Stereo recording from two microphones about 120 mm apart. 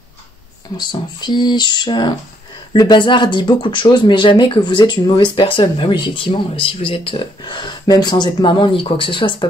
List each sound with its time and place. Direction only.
0.7 s speech: 35° left (ahead or behind)